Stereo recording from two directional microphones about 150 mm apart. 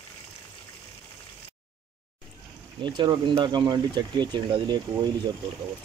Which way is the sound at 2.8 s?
30° right (ahead or behind).